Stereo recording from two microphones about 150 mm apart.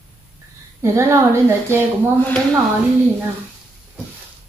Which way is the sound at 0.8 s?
20° right (ahead or behind).